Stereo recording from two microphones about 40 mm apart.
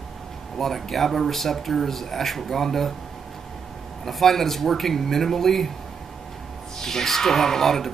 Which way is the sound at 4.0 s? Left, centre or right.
Centre.